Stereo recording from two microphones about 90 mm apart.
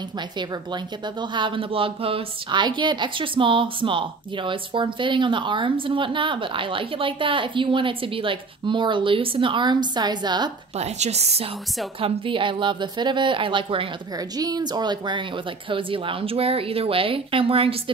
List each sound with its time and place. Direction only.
1.0 s a woman's voice: 60° right (ahead or behind)
12.0 s a woman's voice: 70° right (ahead or behind)
14.1 s speech: 45° right (ahead or behind); by 17.9 s 90° right